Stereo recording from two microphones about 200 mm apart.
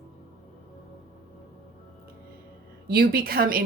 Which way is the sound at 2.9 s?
50° right (ahead or behind).